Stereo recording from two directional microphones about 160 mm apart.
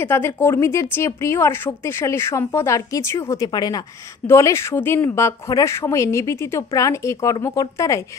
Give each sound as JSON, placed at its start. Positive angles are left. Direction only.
{"t": 0.0, "sound": "a woman's voice", "side_deg": 15}